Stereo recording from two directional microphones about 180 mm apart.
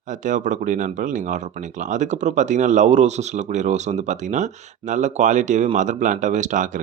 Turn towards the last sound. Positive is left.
turn(degrees=-45)  # may be behind; listen again after turning